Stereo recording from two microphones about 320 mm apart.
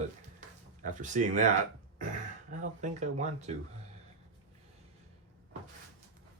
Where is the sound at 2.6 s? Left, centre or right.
Right.